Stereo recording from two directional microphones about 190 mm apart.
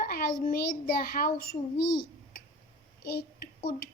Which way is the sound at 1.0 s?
50° left (ahead or behind).